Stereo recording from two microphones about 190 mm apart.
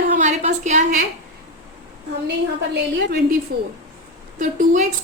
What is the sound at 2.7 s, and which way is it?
Speech, 60° right (ahead or behind).